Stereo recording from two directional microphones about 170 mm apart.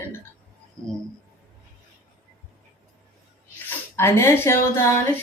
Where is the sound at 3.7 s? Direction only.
15° left (ahead or behind).